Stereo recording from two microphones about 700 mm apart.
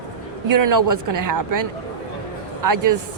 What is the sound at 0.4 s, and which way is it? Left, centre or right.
Speech, right.